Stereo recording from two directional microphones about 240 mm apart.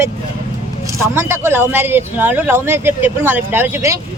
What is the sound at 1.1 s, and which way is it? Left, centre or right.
Speech, centre.